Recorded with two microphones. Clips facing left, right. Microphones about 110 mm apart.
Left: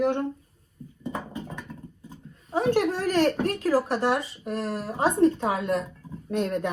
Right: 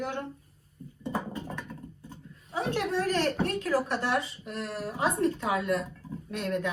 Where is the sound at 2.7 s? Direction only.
40° left (ahead or behind).